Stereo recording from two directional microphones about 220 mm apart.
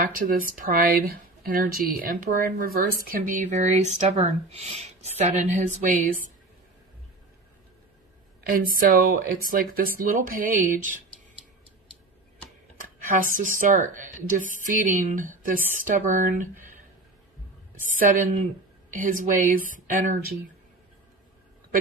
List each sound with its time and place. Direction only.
0.0 s speech: 40° right (ahead or behind)
8.4 s speech: 40° right (ahead or behind)
12.8 s a sound: 40° right (ahead or behind)
13.3 s speech: 35° right (ahead or behind)
17.8 s speech: 35° right (ahead or behind)